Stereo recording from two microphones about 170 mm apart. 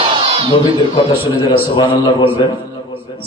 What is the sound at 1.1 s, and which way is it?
A man's voice, 30° left (ahead or behind).